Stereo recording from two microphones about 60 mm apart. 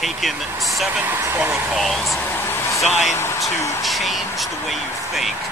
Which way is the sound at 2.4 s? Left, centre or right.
Left.